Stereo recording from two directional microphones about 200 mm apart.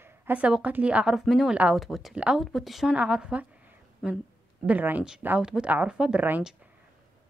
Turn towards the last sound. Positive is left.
turn(degrees=-5)  # may be behind; listen again after turning